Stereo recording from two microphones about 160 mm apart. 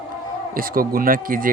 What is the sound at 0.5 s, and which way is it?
Speech, 65° right (ahead or behind).